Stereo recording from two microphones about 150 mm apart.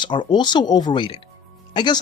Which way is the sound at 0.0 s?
30° left (ahead or behind).